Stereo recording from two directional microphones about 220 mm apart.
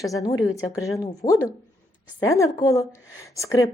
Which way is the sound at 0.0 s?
15° left (ahead or behind).